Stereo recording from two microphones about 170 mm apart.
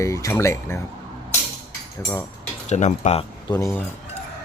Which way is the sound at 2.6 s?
40° left (ahead or behind).